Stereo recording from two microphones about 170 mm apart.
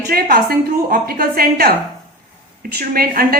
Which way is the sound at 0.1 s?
60° right (ahead or behind).